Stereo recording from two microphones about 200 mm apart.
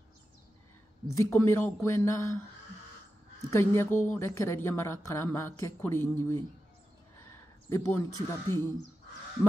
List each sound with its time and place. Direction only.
1.1 s speech: 10° left (ahead or behind)
3.4 s speech: 15° left (ahead or behind)
7.7 s speech: 15° left (ahead or behind)